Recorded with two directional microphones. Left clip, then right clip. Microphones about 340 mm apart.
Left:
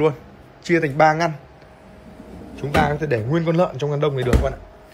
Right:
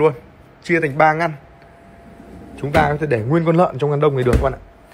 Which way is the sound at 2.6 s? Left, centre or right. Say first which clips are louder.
Right 3 dB; centre.